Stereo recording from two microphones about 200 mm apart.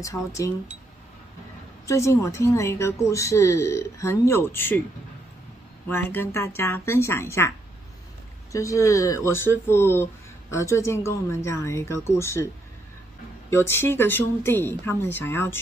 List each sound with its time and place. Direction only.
0.0 s speech: 15° left (ahead or behind)
1.9 s speech: 15° left (ahead or behind)
5.9 s speech: 10° left (ahead or behind)
13.5 s speech: 10° left (ahead or behind)